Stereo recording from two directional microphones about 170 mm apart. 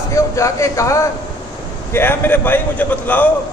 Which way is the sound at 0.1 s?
15° left (ahead or behind).